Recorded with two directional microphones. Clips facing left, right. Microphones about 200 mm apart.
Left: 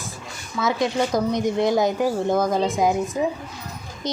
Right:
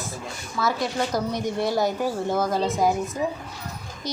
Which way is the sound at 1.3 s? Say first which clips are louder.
Left 5 dB; 20° left (ahead or behind).